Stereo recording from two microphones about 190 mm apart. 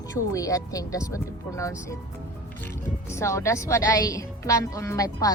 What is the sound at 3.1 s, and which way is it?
A woman's voice, 15° left (ahead or behind).